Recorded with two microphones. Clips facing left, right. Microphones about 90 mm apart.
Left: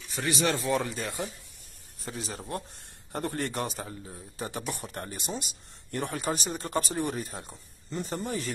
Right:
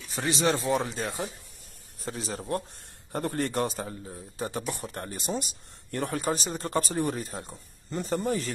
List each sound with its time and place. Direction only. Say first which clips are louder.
0.1 s speech: right 2 dB; 25° right (ahead or behind)
2.0 s a man's voice: right 3 dB; 40° right (ahead or behind)